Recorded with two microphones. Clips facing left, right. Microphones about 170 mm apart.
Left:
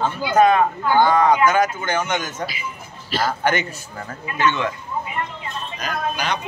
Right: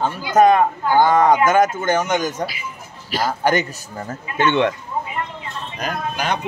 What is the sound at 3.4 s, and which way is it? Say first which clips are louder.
Speech: right 5 dB; 40° right (ahead or behind).